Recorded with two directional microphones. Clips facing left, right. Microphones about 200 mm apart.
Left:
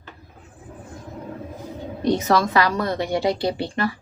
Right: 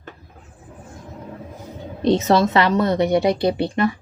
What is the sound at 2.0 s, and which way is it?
A woman's voice, 25° right (ahead or behind).